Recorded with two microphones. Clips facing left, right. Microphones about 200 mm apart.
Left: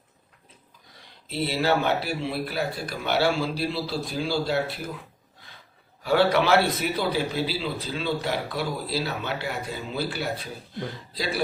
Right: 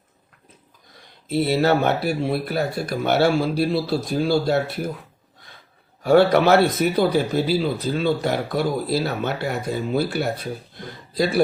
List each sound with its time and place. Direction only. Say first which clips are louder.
1.3 s speech: right 6 dB; 45° right (ahead or behind)
6.0 s speech: right 6 dB; 45° right (ahead or behind)